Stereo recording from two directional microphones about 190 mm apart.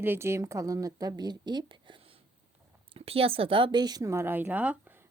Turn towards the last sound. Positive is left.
turn(degrees=-5)  # may be behind; listen again after turning